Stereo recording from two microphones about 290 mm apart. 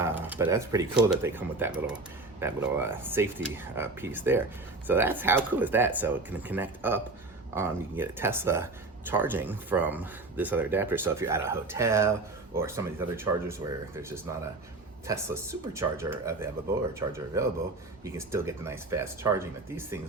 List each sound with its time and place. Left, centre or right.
0.0 s speech: centre
18.0 s speech: centre